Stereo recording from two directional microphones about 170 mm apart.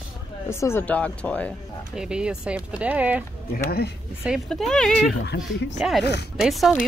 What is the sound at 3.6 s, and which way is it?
Speech, 65° left (ahead or behind).